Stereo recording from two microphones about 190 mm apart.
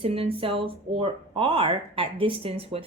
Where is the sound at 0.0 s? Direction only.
30° right (ahead or behind).